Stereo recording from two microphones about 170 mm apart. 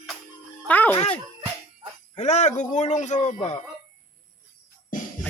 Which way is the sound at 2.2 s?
45° left (ahead or behind).